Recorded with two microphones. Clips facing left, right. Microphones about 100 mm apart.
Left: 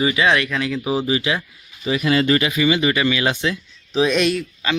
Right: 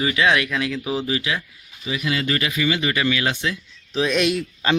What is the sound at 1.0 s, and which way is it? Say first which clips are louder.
Speech: left 4 dB; 25° left (ahead or behind).